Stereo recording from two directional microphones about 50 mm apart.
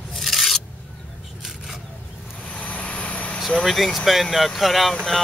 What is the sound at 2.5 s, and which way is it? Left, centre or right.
Vehicle, left.